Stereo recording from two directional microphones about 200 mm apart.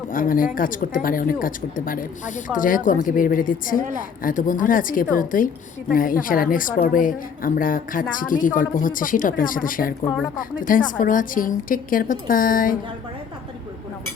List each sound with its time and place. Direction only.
0.1 s speech: 45° left (ahead or behind)